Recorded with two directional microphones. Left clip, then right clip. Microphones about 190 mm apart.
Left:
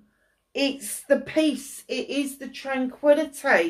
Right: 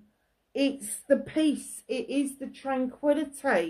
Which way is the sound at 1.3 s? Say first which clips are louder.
Left 4 dB; 50° right (ahead or behind).